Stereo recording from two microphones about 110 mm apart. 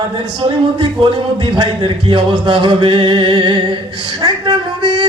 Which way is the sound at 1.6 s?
50° right (ahead or behind).